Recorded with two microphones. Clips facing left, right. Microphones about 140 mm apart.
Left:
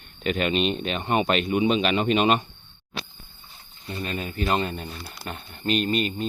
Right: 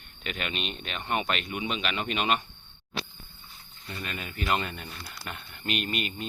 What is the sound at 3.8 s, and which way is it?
Speech, 30° left (ahead or behind).